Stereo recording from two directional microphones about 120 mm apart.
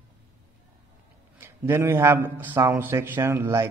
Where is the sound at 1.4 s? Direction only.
20° right (ahead or behind).